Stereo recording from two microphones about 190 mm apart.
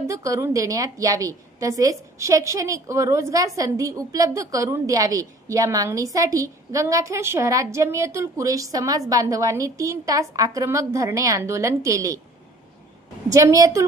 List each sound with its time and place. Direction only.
0.0 s a woman's voice: 15° right (ahead or behind)
13.3 s a woman's voice: 15° right (ahead or behind)